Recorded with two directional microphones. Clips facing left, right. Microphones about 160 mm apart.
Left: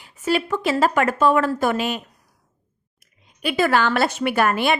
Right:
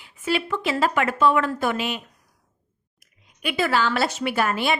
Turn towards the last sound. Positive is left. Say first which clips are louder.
# left 3 dB
turn(degrees=60)  # may be behind; listen again after turning